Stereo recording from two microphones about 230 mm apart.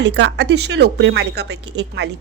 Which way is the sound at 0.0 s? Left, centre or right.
Right.